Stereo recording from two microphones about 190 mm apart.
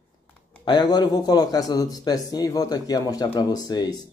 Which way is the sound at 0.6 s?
20° left (ahead or behind).